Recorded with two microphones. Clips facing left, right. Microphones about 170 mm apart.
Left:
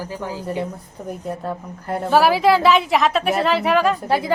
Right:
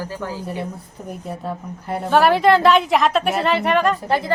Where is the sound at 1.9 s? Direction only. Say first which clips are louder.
Even; centre (ahead or behind).